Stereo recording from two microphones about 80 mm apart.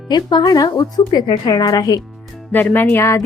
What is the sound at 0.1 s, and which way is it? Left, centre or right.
A woman's voice, left.